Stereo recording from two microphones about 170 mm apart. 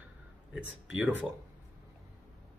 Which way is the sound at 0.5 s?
5° right (ahead or behind).